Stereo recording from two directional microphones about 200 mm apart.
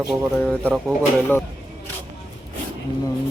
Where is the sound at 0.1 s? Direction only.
Centre (ahead or behind).